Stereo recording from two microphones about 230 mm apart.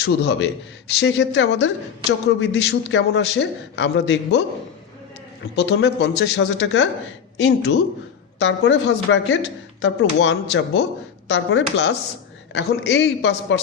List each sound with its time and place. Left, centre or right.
0.0 s speech: left
5.5 s a man's voice: left